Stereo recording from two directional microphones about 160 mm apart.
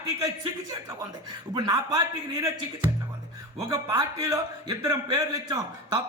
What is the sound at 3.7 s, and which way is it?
A man's voice, 20° right (ahead or behind).